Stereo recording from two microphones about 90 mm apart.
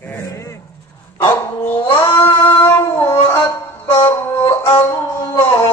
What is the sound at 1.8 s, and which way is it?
Child singing, 25° left (ahead or behind).